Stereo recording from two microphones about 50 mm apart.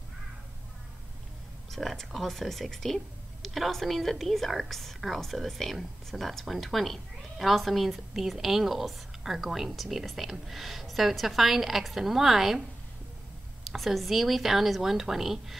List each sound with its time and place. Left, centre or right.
1.7 s a woman's voice: centre
13.7 s a woman's voice: centre